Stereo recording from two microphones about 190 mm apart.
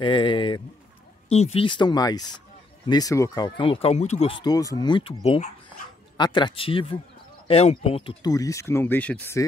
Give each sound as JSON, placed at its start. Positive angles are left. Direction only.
{"t": 0.0, "sound": "speech", "side_deg": 25}